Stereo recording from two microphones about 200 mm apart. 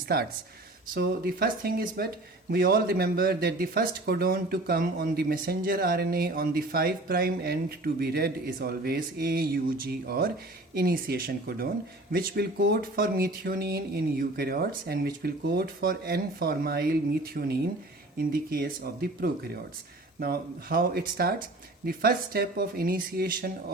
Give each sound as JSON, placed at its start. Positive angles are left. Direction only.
{"t": 0.9, "sound": "speech", "side_deg": -55}